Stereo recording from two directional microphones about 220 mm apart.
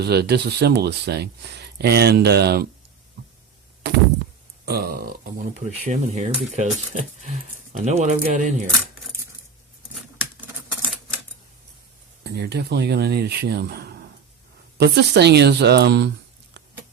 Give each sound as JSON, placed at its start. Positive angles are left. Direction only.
{"t": 0.0, "sound": "speech", "side_deg": -50}
{"t": 4.6, "sound": "speech", "side_deg": -45}
{"t": 5.5, "sound": "speech", "side_deg": -35}
{"t": 12.2, "sound": "speech", "side_deg": -50}
{"t": 16.6, "sound": "a sound", "side_deg": -50}